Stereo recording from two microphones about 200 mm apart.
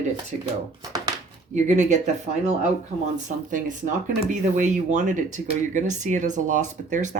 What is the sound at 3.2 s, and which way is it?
Speech, 40° right (ahead or behind).